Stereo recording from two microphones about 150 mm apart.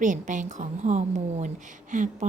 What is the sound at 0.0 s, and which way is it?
A woman's voice, 55° right (ahead or behind).